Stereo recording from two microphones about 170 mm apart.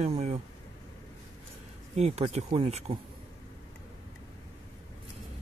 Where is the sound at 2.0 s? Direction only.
40° right (ahead or behind).